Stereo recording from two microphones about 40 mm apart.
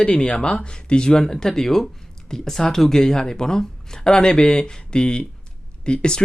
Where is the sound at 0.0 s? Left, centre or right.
Left.